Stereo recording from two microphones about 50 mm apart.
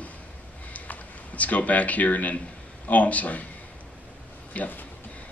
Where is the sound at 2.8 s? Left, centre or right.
Left.